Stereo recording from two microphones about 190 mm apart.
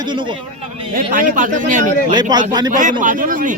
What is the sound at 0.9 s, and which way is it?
A man's voice, 45° right (ahead or behind).